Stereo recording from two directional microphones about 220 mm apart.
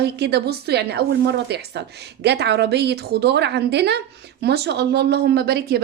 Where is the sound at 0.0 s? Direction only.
50° right (ahead or behind).